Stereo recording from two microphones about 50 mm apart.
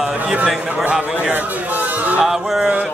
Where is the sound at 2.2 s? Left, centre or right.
Centre.